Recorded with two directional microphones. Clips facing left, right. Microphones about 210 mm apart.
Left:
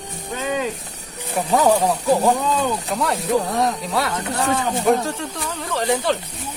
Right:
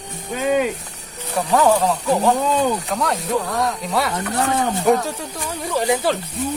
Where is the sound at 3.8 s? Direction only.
Centre (ahead or behind).